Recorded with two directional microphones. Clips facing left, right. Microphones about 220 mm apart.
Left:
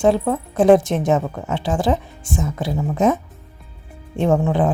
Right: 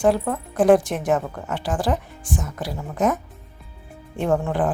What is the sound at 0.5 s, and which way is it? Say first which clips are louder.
A woman's voice: left 3 dB; 25° left (ahead or behind).